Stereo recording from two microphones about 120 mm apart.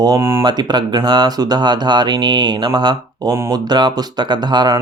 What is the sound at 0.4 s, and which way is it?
Speech, 35° right (ahead or behind).